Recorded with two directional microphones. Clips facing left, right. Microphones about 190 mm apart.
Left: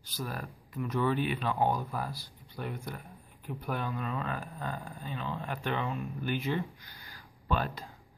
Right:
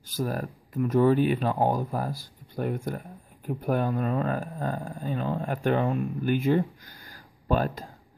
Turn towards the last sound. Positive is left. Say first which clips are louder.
# right 7 dB
turn(degrees=-45)  # may be behind; listen again after turning